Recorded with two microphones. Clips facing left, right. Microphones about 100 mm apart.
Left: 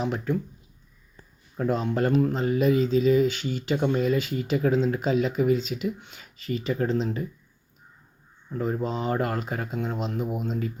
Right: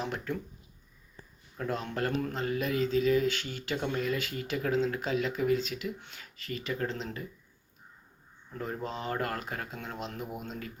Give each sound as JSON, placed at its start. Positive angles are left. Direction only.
{"t": 1.5, "sound": "speech", "side_deg": 20}
{"t": 8.4, "sound": "speech", "side_deg": 15}